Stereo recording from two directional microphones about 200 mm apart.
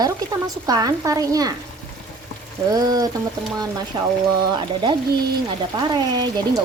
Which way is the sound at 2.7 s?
20° right (ahead or behind).